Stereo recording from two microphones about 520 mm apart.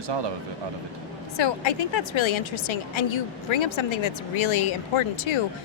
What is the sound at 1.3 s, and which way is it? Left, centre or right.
A woman's voice, left.